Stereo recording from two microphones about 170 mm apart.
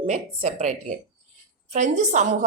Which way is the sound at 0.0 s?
40° right (ahead or behind).